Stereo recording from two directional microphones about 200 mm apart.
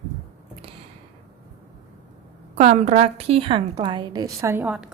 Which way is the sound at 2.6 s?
35° right (ahead or behind).